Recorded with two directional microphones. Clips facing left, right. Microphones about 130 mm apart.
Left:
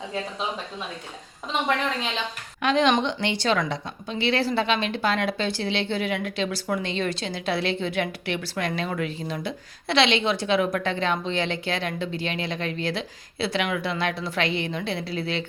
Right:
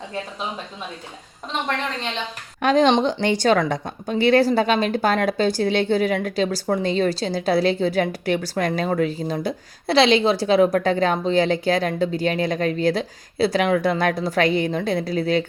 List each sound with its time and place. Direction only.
2.6 s speech: 40° right (ahead or behind)